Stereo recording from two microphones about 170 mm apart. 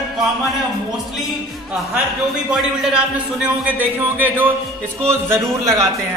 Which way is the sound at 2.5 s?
5° right (ahead or behind).